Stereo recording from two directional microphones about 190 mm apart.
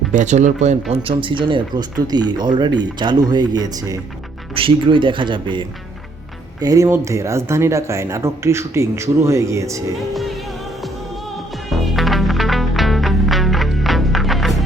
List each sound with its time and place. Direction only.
0.1 s speech: 40° right (ahead or behind); by 9.8 s 15° right (ahead or behind)
11.7 s music: centre (ahead or behind)